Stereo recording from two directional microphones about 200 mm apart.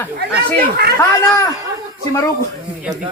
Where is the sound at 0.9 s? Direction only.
15° left (ahead or behind).